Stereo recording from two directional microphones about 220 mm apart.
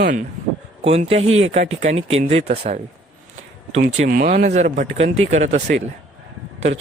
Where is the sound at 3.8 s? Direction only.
35° right (ahead or behind).